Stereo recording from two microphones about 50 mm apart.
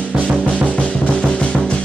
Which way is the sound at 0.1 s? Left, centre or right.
Centre.